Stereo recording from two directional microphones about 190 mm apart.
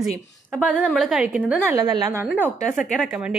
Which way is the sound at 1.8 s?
20° right (ahead or behind).